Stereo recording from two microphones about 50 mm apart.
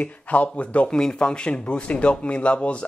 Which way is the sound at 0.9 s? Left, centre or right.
Centre.